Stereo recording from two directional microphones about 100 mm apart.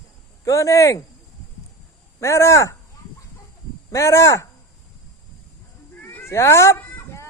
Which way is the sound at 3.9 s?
30° left (ahead or behind).